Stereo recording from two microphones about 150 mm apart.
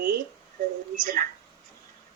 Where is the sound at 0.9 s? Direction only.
65° right (ahead or behind).